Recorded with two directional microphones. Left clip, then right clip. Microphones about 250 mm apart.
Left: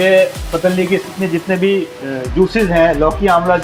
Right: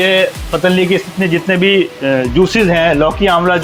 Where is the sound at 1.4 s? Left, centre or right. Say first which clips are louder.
Right 4 dB; right.